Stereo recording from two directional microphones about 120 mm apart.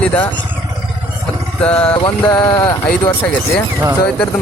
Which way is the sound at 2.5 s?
25° left (ahead or behind).